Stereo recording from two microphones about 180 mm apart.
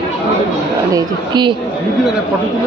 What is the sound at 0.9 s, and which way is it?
Speech, 25° right (ahead or behind).